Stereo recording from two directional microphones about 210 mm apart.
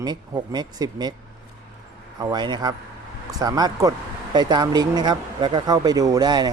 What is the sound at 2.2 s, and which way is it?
Speech, 20° right (ahead or behind).